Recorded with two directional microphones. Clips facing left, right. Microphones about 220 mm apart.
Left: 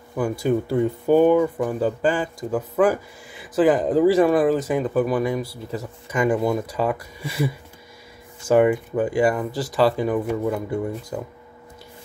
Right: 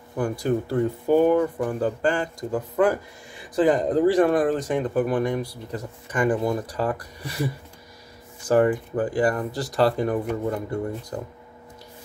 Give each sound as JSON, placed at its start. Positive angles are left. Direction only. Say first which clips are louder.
{"t": 0.2, "sound": "speech", "louder": "left 2 dB", "side_deg": 10}
{"t": 9.0, "sound": "speech", "louder": "left 3 dB", "side_deg": 10}